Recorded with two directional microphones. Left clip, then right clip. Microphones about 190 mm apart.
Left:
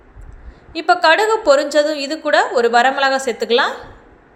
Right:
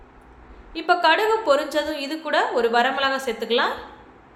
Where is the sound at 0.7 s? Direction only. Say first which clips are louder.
Left 6 dB; 30° left (ahead or behind).